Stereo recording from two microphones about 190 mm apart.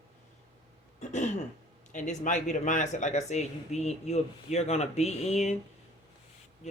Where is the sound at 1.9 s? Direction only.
40° left (ahead or behind).